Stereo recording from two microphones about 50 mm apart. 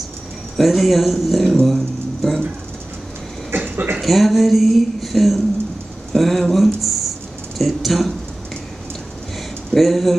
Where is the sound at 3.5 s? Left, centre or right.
Right.